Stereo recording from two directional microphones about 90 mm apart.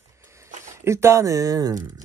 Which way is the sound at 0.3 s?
35° right (ahead or behind).